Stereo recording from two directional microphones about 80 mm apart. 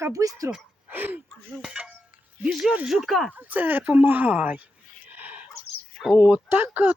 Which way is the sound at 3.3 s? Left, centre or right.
Right.